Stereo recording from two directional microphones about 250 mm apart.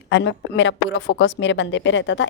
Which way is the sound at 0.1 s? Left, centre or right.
Left.